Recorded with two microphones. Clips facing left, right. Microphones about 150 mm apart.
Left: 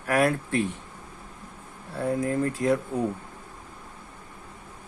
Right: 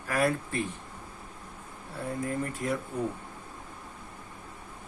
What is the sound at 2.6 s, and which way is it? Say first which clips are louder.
Speech: left 8 dB; 90° left.